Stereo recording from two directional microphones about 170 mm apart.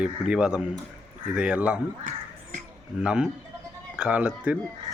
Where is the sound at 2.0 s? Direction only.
45° right (ahead or behind).